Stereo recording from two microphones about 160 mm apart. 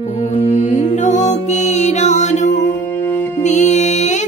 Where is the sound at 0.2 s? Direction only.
45° left (ahead or behind).